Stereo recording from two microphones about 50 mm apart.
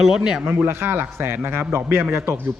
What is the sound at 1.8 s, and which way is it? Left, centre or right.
Speech, right.